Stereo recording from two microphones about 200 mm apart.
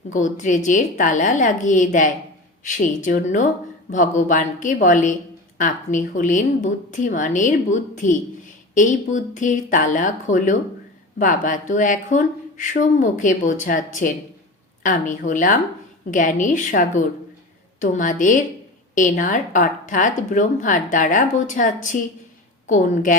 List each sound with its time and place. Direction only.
0.1 s a woman's voice: 40° left (ahead or behind)